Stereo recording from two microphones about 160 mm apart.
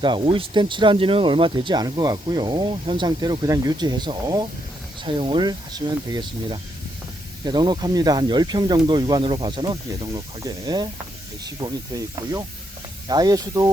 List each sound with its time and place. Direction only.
0.0 s speech: 30° right (ahead or behind)